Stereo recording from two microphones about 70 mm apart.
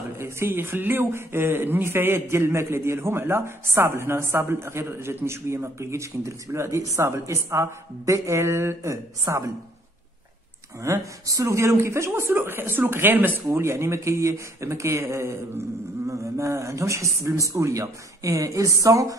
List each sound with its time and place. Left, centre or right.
0.2 s speech: right
8.9 s speech: right
10.8 s speech: right
13.6 s speech: right